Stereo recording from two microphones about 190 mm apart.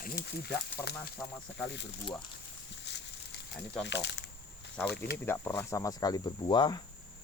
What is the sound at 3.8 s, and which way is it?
Speech, 65° left (ahead or behind).